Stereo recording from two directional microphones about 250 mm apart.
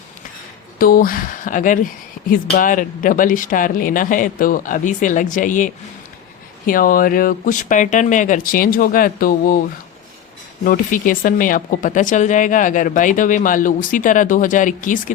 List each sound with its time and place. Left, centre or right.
0.8 s speech: left
10.6 s speech: left